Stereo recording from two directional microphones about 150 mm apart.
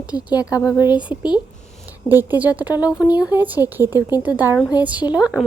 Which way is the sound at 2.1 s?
10° right (ahead or behind).